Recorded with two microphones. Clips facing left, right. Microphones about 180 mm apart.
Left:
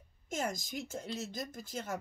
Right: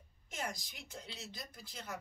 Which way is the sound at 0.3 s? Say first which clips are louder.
Left 7 dB; 45° left (ahead or behind).